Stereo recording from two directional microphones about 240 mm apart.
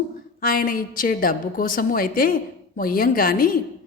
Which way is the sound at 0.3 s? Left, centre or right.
Left.